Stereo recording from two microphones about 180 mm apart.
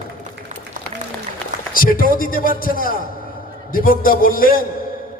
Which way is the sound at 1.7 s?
50° left (ahead or behind).